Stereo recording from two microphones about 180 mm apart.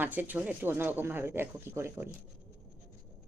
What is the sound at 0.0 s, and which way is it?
Speech, 10° right (ahead or behind).